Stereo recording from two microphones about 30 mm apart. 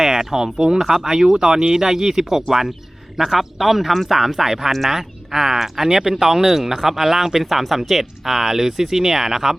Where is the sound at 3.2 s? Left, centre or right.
Centre.